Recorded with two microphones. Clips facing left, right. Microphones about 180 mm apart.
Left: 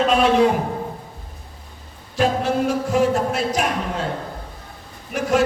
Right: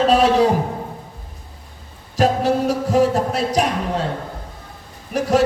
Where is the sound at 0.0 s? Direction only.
35° right (ahead or behind).